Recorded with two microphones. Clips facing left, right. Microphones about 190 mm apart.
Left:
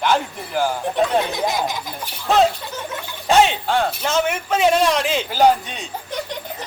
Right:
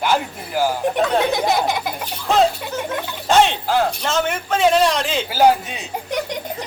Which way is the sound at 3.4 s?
5° right (ahead or behind).